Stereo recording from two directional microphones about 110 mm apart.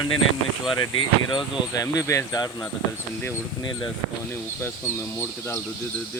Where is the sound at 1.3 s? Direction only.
35° left (ahead or behind).